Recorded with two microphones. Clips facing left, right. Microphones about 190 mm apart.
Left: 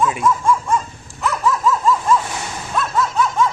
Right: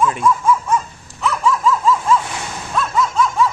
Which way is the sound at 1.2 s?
Centre (ahead or behind).